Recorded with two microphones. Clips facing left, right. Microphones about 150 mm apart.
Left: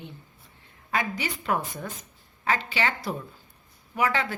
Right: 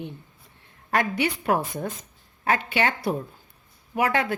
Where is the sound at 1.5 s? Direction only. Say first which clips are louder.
Even; 30° right (ahead or behind).